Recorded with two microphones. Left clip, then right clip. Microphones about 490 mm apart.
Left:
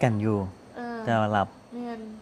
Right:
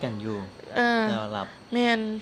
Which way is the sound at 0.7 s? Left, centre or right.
Right.